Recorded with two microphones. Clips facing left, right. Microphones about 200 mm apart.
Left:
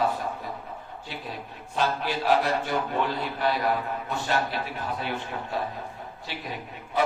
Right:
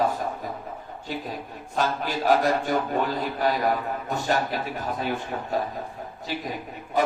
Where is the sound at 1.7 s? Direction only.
45° right (ahead or behind).